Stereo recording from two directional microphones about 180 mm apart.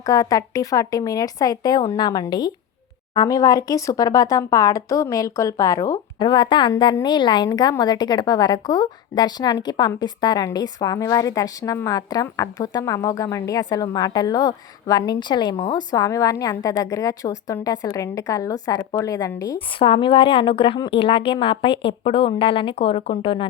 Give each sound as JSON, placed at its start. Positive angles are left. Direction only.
{"t": 0.0, "sound": "speech", "side_deg": 20}
{"t": 19.5, "sound": "speech", "side_deg": 30}